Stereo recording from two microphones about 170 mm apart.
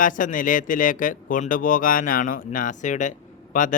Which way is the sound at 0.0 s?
50° left (ahead or behind).